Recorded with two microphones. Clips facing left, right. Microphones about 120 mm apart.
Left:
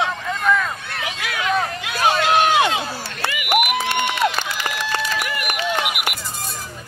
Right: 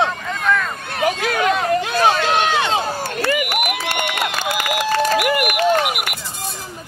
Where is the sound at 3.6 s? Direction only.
45° right (ahead or behind).